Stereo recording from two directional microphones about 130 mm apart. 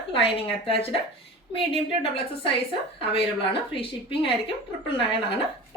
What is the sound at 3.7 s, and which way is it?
Speech, 45° left (ahead or behind).